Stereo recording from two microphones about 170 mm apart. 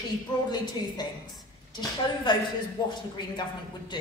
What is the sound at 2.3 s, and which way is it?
Speech, 25° left (ahead or behind).